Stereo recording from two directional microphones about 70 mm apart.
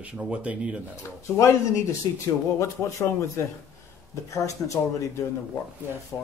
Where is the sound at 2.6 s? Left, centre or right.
Left.